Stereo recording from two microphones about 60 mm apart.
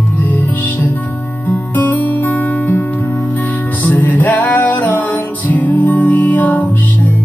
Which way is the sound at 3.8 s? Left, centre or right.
Left.